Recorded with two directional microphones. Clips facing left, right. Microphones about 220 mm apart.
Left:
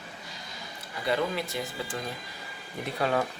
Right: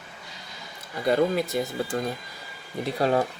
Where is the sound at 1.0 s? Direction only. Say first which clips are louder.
Right 6 dB; 45° right (ahead or behind).